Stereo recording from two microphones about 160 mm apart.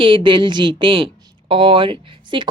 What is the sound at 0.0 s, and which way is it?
A woman's voice, 30° right (ahead or behind).